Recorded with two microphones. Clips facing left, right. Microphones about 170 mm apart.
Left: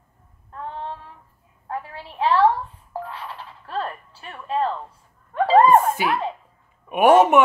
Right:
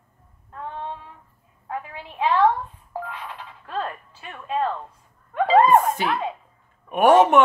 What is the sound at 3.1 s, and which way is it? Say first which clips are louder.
Music: left 1 dB; 15° right (ahead or behind).